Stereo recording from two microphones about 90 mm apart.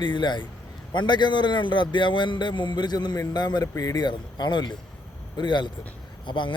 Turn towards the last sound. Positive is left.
turn(degrees=65)  # may be behind; listen again after turning